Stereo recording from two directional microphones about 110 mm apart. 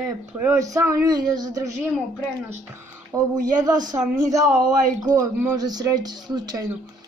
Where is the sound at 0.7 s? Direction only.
30° right (ahead or behind).